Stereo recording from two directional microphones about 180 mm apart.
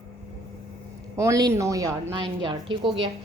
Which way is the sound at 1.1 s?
20° right (ahead or behind).